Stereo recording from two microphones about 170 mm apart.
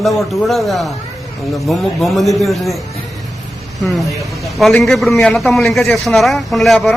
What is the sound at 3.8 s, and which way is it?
A man's voice, centre (ahead or behind).